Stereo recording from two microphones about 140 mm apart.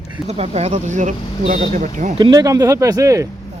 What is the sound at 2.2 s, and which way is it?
Speech, 30° right (ahead or behind).